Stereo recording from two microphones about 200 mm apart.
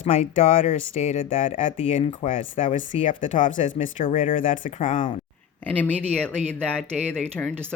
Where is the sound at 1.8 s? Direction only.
30° left (ahead or behind).